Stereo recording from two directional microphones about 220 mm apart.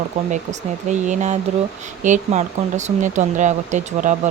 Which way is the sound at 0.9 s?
35° right (ahead or behind).